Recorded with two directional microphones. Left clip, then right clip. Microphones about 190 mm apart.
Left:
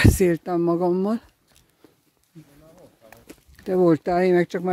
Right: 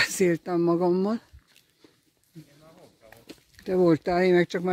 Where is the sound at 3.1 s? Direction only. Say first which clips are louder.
Right 1 dB; 15° left (ahead or behind).